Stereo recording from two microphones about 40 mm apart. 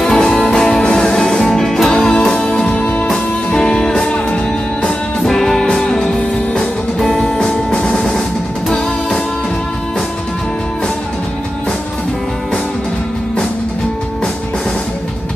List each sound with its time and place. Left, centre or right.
0.1 s music: centre
7.4 s music: left